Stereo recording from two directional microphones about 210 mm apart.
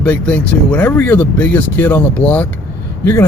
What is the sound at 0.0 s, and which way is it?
Speech, 5° left (ahead or behind).